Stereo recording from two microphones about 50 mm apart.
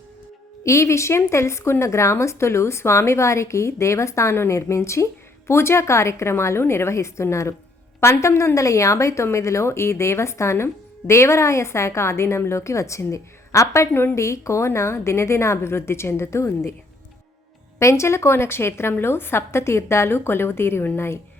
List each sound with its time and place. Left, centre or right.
0.6 s speech: left
5.5 s speech: left
12.5 s speech: left
13.9 s a woman's voice: left
14.2 s speech: left
17.7 s a woman's voice: left